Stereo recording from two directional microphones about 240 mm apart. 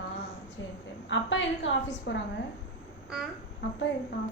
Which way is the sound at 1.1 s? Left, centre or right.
Left.